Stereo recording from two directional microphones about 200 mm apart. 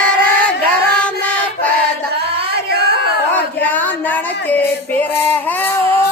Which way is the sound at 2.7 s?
55° right (ahead or behind).